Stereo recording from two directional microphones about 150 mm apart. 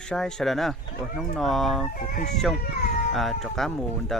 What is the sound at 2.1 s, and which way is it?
Speech, 75° left (ahead or behind).